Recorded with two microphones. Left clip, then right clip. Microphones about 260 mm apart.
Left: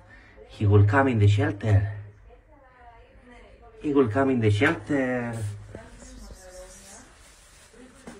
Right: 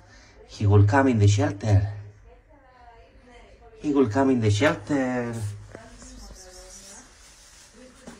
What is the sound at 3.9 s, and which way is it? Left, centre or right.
Speech, centre.